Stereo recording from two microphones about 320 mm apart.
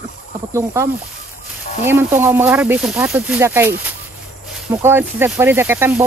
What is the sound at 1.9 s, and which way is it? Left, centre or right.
Speech, centre.